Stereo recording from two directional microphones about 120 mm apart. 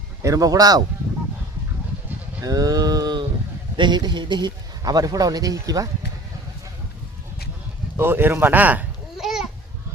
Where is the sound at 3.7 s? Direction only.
40° right (ahead or behind).